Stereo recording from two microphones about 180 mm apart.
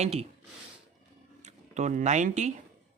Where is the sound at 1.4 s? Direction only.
40° right (ahead or behind).